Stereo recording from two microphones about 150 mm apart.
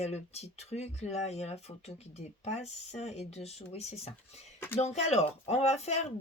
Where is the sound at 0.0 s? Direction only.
45° left (ahead or behind).